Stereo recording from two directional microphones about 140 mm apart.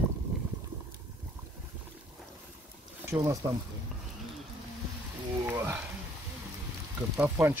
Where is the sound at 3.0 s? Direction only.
20° right (ahead or behind).